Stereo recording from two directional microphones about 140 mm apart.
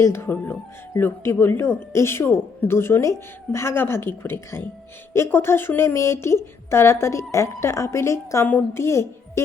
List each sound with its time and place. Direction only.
0.0 s a woman's voice: 15° left (ahead or behind)